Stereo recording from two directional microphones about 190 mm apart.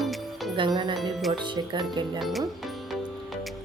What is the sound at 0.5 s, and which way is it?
Speech, 25° right (ahead or behind).